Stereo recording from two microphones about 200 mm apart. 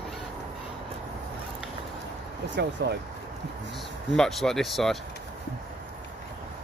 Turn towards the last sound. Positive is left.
turn(degrees=0)  # may be behind; listen again after turning